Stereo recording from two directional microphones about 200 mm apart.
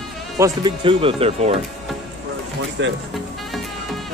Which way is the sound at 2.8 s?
65° right (ahead or behind).